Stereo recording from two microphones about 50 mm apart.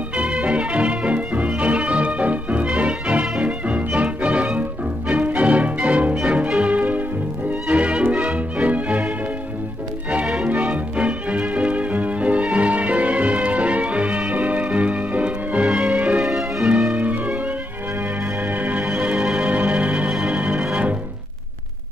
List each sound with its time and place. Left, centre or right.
0.1 s music: right
10.6 s music: right
16.1 s music: centre
16.9 s music: right
18.5 s music: right
18.9 s music: right
20.1 s music: centre
20.3 s organ: right